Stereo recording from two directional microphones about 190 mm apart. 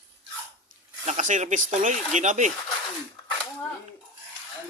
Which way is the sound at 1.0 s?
40° right (ahead or behind).